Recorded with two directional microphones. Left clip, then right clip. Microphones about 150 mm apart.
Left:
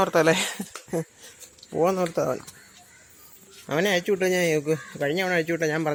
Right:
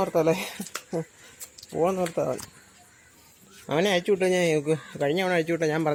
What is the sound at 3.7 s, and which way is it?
Speech, 10° right (ahead or behind).